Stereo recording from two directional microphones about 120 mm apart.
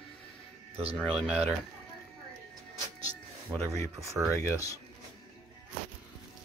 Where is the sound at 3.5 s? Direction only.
30° right (ahead or behind).